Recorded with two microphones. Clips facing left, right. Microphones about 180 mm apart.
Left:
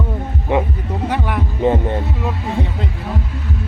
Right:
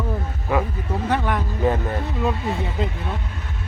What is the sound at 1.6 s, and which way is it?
Heart sounds, 20° left (ahead or behind).